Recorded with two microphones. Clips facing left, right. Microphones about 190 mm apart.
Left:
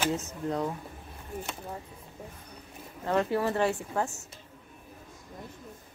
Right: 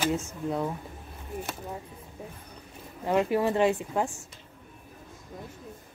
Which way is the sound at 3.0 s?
15° right (ahead or behind).